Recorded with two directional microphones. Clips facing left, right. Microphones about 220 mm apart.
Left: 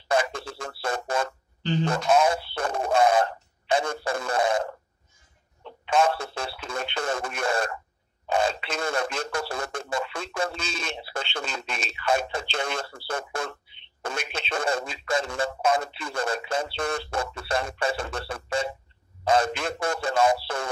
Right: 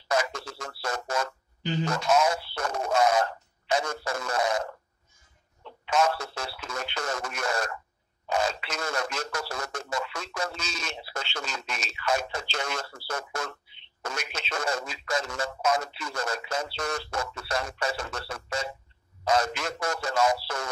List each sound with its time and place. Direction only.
0.1 s music: 30° left (ahead or behind)
0.8 s a sound: 30° left (ahead or behind)
1.9 s radio: 30° left (ahead or behind)
5.9 s radio: 30° left (ahead or behind)
8.3 s a sound: 30° left (ahead or behind)
9.5 s speech: 30° left (ahead or behind)